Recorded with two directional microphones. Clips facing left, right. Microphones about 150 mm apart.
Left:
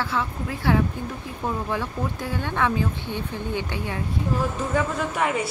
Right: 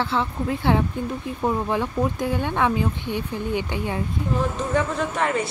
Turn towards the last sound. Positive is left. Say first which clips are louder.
# right 1 dB
turn(degrees=10)  # may be behind; listen again after turning